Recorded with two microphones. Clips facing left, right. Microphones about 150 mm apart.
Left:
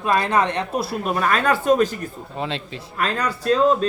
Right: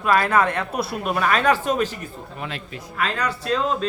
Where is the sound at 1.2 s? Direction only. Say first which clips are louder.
Right 1 dB; 40° left (ahead or behind).